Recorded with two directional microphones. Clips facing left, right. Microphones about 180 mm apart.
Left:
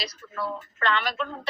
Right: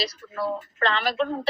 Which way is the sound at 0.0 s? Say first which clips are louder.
Right 4 dB; 35° right (ahead or behind).